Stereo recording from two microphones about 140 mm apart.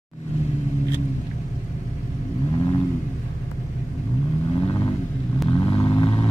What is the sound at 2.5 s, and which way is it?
Vehicle, 30° left (ahead or behind).